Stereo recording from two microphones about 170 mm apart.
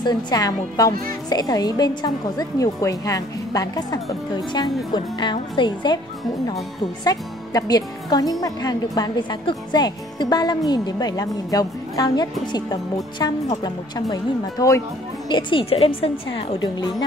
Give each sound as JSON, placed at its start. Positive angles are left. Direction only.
{"t": 0.0, "sound": "speech", "side_deg": 25}
{"t": 7.1, "sound": "speech", "side_deg": 20}